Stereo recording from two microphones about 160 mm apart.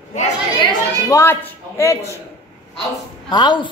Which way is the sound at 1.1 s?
15° left (ahead or behind).